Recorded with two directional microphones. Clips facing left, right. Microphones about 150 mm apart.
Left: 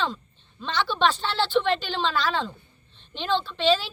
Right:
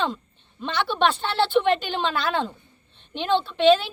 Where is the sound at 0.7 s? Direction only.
60° right (ahead or behind).